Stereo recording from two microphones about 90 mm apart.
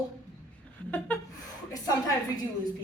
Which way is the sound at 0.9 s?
20° left (ahead or behind).